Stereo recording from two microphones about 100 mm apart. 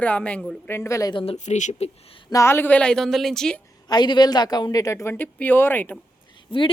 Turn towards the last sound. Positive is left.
turn(degrees=60)  # may be behind; listen again after turning